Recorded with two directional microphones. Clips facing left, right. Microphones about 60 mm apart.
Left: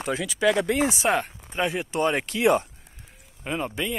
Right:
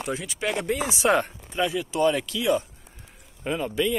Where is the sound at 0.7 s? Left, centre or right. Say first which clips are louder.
Left 4 dB; left.